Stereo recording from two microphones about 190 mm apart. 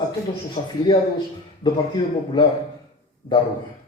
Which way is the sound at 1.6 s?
25° left (ahead or behind).